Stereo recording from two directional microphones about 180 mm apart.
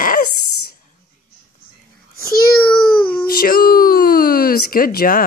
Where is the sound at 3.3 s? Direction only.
55° left (ahead or behind).